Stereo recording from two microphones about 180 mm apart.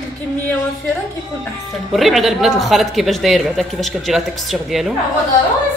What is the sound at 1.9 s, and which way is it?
Speech, centre (ahead or behind).